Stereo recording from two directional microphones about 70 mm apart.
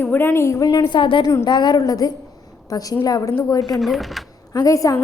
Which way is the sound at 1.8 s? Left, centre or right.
Left.